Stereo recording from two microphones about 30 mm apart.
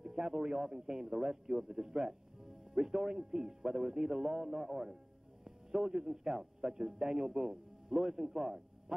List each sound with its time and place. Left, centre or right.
0.3 s a man's voice: centre